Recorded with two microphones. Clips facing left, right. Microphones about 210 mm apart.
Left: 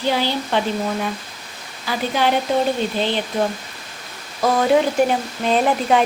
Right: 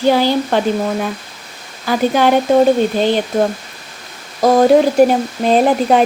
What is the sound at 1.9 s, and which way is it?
Speech, 50° right (ahead or behind).